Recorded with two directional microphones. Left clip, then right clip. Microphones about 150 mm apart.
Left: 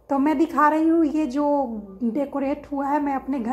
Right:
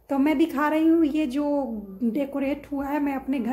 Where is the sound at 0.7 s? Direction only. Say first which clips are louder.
Left 1 dB; 25° right (ahead or behind).